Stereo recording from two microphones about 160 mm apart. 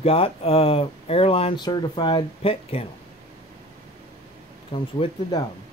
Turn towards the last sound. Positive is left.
turn(degrees=30)  # may be behind; listen again after turning